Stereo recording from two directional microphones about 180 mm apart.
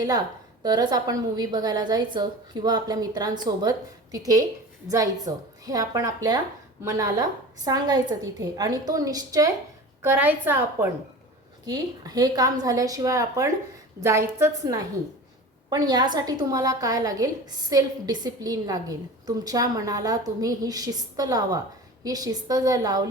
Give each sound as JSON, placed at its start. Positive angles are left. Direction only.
{"t": 0.6, "sound": "a woman's voice", "side_deg": -20}
{"t": 5.6, "sound": "a woman's voice", "side_deg": -20}
{"t": 11.6, "sound": "a woman's voice", "side_deg": -20}